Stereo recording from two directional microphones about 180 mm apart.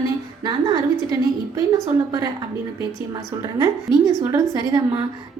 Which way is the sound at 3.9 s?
25° left (ahead or behind).